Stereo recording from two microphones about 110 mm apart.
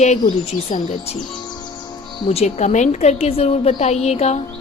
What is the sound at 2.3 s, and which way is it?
A woman's voice, 80° left.